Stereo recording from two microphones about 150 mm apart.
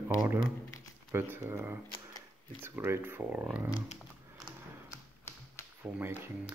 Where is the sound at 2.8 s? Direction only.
15° right (ahead or behind).